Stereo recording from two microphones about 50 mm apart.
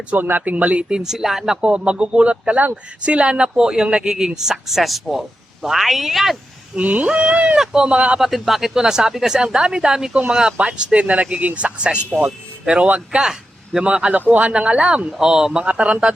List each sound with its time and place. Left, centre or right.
0.2 s speech: right; by 1.5 s centre
1.6 s speech: right; by 6.3 s centre
6.7 s speech: right
8.2 s speech: centre; by 14.2 s right
14.2 s speech: right
14.5 s speech: right
15.6 s speech: right